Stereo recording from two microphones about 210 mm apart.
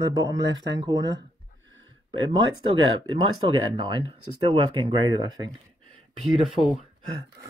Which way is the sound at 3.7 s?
20° right (ahead or behind).